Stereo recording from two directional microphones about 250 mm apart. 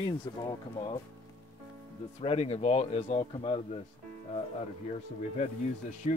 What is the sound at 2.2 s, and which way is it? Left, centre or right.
Speech, left.